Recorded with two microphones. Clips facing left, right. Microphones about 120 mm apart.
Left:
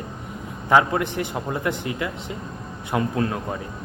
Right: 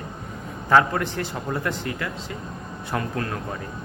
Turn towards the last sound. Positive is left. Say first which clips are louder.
# left 4 dB
turn(degrees=20)  # may be behind; listen again after turning